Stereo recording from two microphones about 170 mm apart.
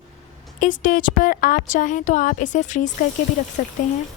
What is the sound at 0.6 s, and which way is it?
A woman's voice, 50° left (ahead or behind).